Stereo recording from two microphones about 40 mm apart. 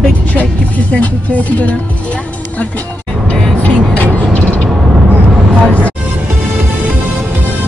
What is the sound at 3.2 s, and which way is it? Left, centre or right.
Vehicle, left.